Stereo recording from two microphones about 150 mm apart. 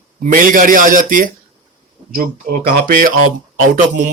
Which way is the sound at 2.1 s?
75° right (ahead or behind).